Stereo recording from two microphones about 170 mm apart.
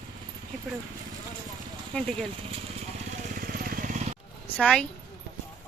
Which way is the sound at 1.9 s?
5° left (ahead or behind).